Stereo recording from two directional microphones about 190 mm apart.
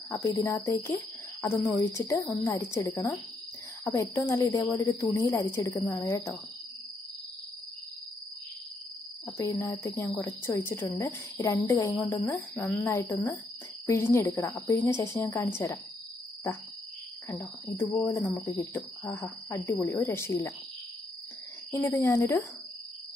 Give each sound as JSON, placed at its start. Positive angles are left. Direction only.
{"t": 0.1, "sound": "speech", "side_deg": 15}
{"t": 9.4, "sound": "speech", "side_deg": 15}
{"t": 17.3, "sound": "speech", "side_deg": 15}
{"t": 21.7, "sound": "speech", "side_deg": 15}